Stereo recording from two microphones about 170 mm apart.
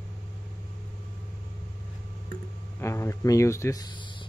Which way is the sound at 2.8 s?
15° left (ahead or behind).